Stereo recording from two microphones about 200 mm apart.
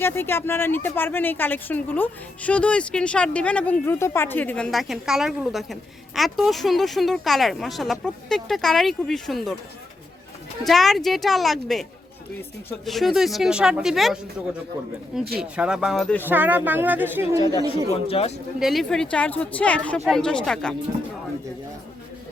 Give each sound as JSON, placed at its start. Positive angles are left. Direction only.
{"t": 0.0, "sound": "speech", "side_deg": 10}
{"t": 10.6, "sound": "speech", "side_deg": 0}
{"t": 15.4, "sound": "speech", "side_deg": -5}
{"t": 16.2, "sound": "speech", "side_deg": -10}
{"t": 17.9, "sound": "speech", "side_deg": 30}
{"t": 18.6, "sound": "speech", "side_deg": 0}